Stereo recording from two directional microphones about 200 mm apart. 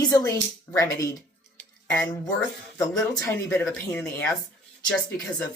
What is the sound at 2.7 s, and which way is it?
Speech, 15° left (ahead or behind).